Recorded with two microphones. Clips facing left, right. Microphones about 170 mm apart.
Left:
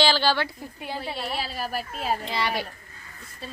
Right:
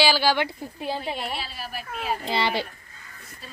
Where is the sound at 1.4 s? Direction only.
40° left (ahead or behind).